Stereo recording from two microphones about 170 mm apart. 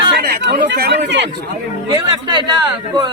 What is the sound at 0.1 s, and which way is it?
Chatter, 75° right (ahead or behind).